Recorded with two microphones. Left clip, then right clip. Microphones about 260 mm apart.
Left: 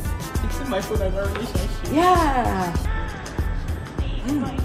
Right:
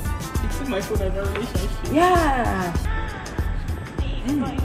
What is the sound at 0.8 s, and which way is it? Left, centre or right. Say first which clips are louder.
Speech: left 2 dB; centre.